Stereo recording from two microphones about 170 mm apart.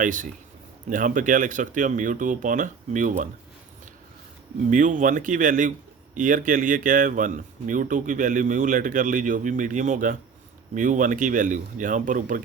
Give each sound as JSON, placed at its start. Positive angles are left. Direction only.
{"t": 0.0, "sound": "speech", "side_deg": -50}
{"t": 4.7, "sound": "speech", "side_deg": -50}